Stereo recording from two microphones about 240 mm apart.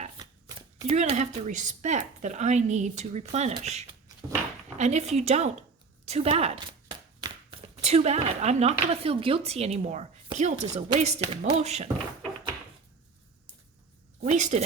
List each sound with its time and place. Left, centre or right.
0.9 s speech: right
6.1 s a sound: right
7.8 s speech: right
14.2 s a woman's voice: right